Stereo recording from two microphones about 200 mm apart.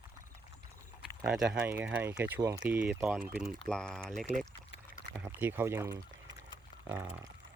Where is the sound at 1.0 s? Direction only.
5° right (ahead or behind).